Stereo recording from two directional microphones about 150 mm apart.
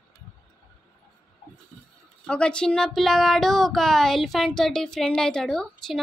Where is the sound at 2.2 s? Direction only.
5° left (ahead or behind).